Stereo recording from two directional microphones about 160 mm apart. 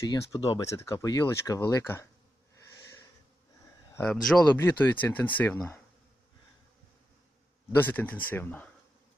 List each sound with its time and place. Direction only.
0.1 s speech: 20° left (ahead or behind)
3.9 s speech: 5° left (ahead or behind)
7.8 s speech: 10° left (ahead or behind)